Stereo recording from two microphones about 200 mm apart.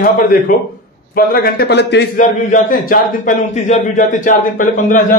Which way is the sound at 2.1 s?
40° left (ahead or behind).